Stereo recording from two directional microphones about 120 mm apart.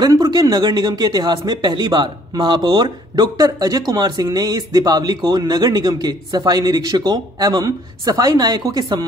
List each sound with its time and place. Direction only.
0.0 s speech: 35° right (ahead or behind)